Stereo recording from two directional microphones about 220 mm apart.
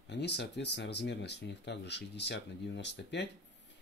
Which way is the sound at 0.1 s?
50° left (ahead or behind).